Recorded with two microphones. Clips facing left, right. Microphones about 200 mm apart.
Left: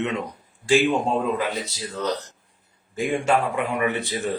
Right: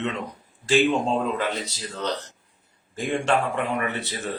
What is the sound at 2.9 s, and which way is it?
Speech, 10° left (ahead or behind).